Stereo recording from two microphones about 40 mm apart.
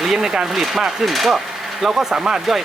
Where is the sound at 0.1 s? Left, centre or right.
Centre.